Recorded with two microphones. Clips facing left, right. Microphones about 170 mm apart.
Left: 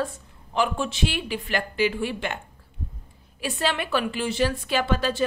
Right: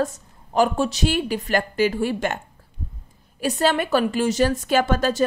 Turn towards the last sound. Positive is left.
turn(degrees=-45)  # may be behind; listen again after turning